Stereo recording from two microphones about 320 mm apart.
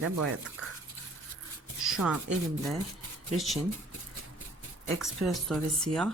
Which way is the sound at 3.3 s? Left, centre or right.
Centre.